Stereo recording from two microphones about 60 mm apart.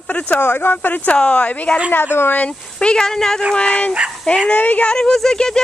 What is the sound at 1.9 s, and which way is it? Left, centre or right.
Speech, left.